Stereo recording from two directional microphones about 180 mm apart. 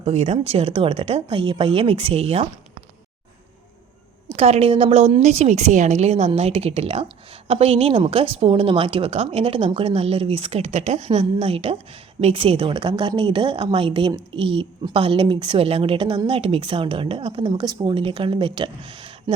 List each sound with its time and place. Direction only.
0.0 s a woman's voice: 35° right (ahead or behind)
4.4 s a woman's voice: 35° right (ahead or behind)